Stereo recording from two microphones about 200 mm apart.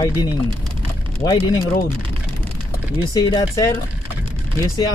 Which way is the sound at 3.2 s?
20° left (ahead or behind).